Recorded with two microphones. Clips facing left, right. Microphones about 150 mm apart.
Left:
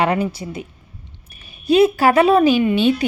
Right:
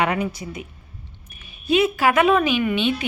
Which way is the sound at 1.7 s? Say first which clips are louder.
Left 5 dB; 35° left (ahead or behind).